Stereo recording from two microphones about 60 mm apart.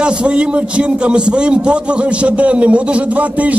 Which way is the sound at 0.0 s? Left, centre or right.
Centre.